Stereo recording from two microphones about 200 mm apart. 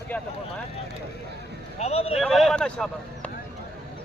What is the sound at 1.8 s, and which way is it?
Speech, 30° left (ahead or behind).